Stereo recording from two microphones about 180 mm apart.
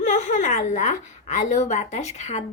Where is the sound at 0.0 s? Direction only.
45° left (ahead or behind).